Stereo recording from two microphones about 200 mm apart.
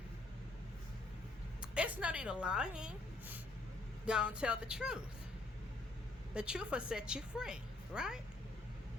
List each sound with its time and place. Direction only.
1.6 s a sound: 5° right (ahead or behind)
4.0 s a woman's voice: 5° right (ahead or behind)
6.3 s a woman's voice: 5° right (ahead or behind)